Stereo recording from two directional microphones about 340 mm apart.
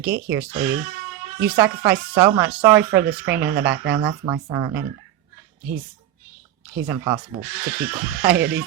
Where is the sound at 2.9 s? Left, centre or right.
Right.